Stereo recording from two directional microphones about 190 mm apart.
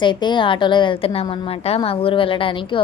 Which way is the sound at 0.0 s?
25° left (ahead or behind).